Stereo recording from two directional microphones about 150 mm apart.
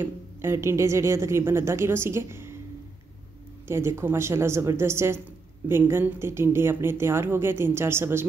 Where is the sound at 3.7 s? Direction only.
20° right (ahead or behind).